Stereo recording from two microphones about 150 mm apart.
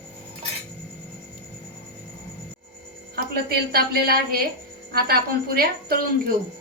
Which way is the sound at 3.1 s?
90° right.